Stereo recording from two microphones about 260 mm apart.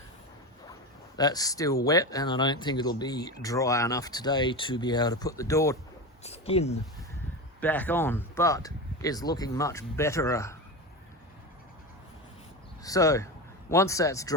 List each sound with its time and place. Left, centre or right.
1.1 s speech: centre
6.2 s speech: left
7.6 s speech: centre
12.8 s speech: centre